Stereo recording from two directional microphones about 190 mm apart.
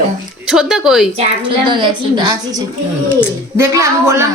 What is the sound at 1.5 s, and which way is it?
A woman's voice, 25° right (ahead or behind).